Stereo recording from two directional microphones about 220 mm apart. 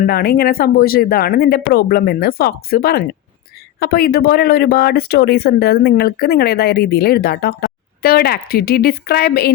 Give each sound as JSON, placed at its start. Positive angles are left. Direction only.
{"t": 0.0, "sound": "speech", "side_deg": 45}